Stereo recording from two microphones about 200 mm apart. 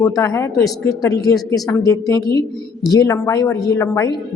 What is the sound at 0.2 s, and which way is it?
Speech, 15° left (ahead or behind).